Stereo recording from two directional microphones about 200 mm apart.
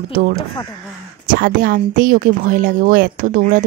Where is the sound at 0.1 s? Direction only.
45° right (ahead or behind).